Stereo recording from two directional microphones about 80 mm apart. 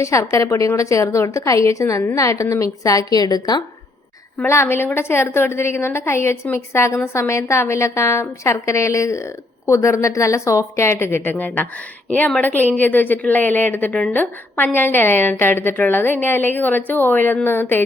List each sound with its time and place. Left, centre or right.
0.0 s a woman's voice: left
4.4 s a woman's voice: left